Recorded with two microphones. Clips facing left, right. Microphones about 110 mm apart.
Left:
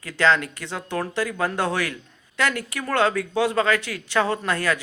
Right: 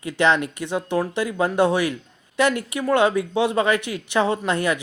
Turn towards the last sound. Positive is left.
turn(degrees=-20)  # may be behind; listen again after turning